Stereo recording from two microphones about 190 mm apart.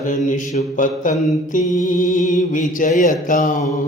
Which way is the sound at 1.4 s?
40° left (ahead or behind).